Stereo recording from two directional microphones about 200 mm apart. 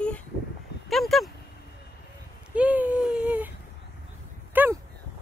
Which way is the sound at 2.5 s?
5° right (ahead or behind).